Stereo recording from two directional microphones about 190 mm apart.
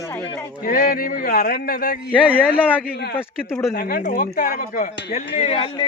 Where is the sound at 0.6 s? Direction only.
50° left (ahead or behind).